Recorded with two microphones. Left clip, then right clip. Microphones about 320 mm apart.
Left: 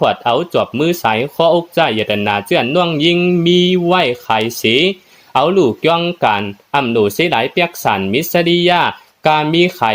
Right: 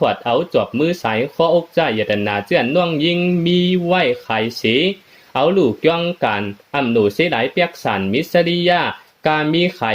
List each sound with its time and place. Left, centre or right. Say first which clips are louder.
0.0 s speech: left 3 dB; left